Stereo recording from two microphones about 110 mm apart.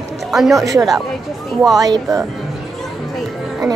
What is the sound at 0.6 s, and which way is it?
A woman's voice, 30° right (ahead or behind).